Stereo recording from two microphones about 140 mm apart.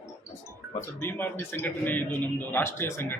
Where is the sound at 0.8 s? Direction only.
15° left (ahead or behind).